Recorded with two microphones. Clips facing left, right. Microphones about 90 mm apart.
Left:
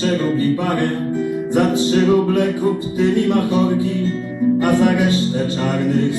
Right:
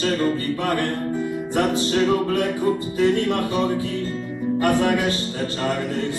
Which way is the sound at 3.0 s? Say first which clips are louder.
Left 4 dB; 15° left (ahead or behind).